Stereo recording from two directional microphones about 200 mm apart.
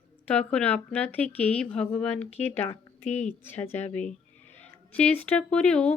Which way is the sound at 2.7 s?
35° left (ahead or behind).